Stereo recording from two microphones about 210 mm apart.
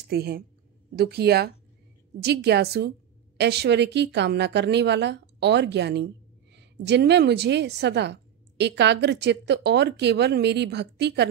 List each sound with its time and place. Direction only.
0.1 s a woman's voice: 50° right (ahead or behind)